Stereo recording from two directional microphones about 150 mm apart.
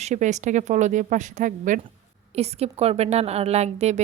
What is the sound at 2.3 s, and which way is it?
Speech, 45° right (ahead or behind).